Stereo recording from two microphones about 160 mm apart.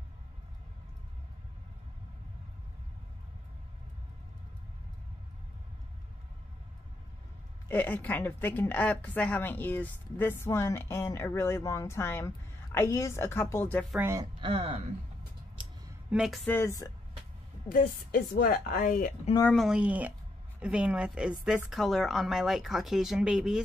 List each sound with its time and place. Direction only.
7.6 s a woman's voice: 10° left (ahead or behind)
13.9 s speech: 15° right (ahead or behind)
14.4 s speech: 40° right (ahead or behind)
15.6 s a sound: 30° right (ahead or behind)
16.1 s a woman's voice: centre (ahead or behind)
16.4 s a woman's voice: 15° left (ahead or behind)
17.6 s speech: 60° left (ahead or behind)
19.5 s a woman's voice: 5° right (ahead or behind)